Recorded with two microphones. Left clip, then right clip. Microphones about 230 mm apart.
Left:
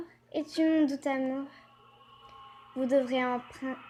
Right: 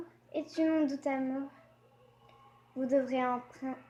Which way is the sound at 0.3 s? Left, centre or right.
Left.